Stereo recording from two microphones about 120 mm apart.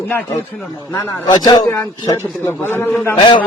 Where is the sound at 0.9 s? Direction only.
30° left (ahead or behind).